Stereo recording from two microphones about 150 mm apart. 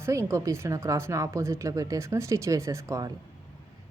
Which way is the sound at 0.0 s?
20° right (ahead or behind).